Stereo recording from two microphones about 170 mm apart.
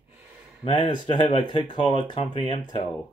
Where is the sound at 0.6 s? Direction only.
30° left (ahead or behind).